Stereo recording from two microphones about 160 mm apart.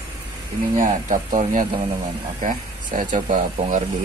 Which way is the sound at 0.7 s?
50° right (ahead or behind).